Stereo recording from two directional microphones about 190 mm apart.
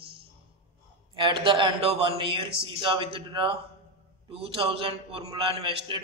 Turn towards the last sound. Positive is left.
turn(degrees=-30)  # may be behind; listen again after turning